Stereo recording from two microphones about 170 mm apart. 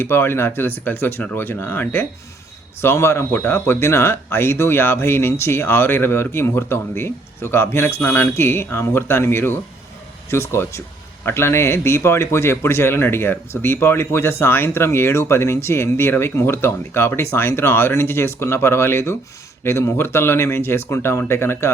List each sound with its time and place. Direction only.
0.0 s speech: 15° left (ahead or behind)